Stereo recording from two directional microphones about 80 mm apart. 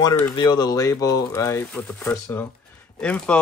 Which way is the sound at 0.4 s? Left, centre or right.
Left.